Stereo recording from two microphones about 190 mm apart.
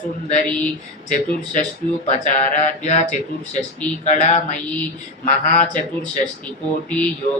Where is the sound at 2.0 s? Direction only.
40° left (ahead or behind).